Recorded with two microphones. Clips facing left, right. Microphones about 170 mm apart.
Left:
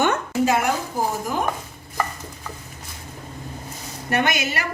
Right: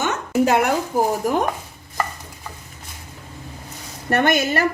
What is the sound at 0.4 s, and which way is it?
Speech, 60° right (ahead or behind).